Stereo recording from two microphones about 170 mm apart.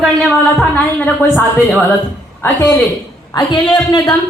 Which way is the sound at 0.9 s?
10° left (ahead or behind).